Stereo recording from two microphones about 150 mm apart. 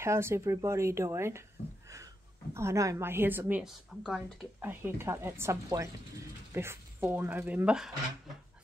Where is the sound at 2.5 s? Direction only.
20° right (ahead or behind); by 4.2 s 5° right (ahead or behind).